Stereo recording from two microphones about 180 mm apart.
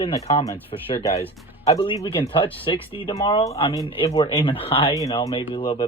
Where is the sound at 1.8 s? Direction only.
30° left (ahead or behind).